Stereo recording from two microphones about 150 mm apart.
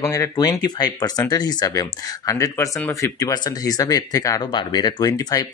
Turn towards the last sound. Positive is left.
turn(degrees=25)  # may be behind; listen again after turning